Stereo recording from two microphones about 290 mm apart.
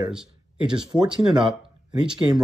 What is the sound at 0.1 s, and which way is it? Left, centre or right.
Speech, centre.